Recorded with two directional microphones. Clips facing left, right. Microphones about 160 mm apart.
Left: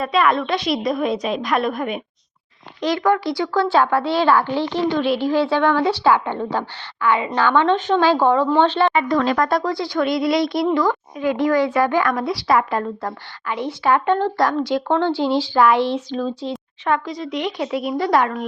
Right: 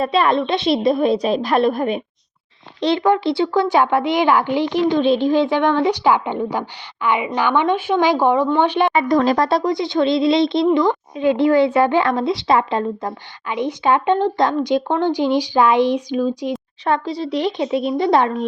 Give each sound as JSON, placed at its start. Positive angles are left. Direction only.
{"t": 0.0, "sound": "a woman's voice", "side_deg": -30}
{"t": 8.9, "sound": "a woman's voice", "side_deg": -40}
{"t": 16.8, "sound": "a woman's voice", "side_deg": -30}